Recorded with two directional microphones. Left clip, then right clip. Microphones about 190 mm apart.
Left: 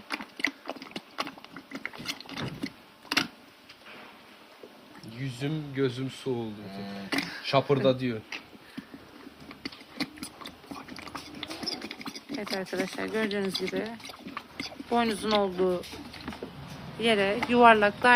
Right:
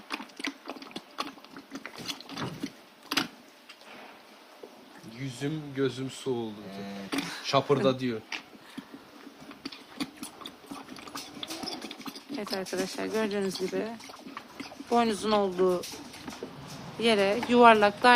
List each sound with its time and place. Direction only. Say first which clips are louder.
0.1 s clip-clop: left 4 dB; 20° left (ahead or behind)
1.7 s a sound: left 2 dB; 20° left (ahead or behind)
5.2 s speech: even; 30° left (ahead or behind); by 8.4 s 15° left (ahead or behind)
9.6 s a sound: left 2 dB; 20° left (ahead or behind)
10.9 s clip-clop: left 1 dB; 20° left (ahead or behind)
12.5 s speech: even; 5° right (ahead or behind)
17.0 s speech: even; 15° right (ahead or behind)